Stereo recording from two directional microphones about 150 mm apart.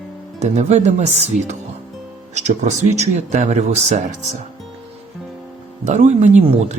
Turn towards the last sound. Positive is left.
turn(degrees=-50)  # may be behind; listen again after turning